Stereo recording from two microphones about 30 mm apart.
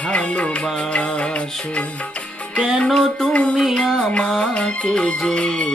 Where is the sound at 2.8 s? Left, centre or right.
Centre.